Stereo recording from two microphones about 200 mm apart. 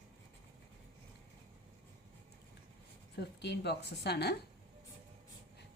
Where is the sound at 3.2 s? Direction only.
60° left (ahead or behind).